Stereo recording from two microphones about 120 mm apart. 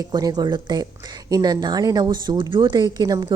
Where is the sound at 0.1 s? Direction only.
35° right (ahead or behind).